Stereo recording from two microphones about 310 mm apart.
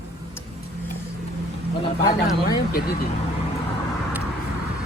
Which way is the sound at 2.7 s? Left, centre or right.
Left.